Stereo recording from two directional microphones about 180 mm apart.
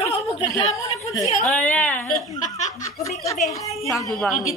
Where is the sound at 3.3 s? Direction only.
20° left (ahead or behind).